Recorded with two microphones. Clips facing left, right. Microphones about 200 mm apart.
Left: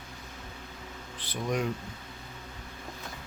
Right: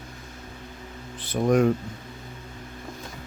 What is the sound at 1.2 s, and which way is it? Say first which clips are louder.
Speech: right 11 dB; 50° right (ahead or behind).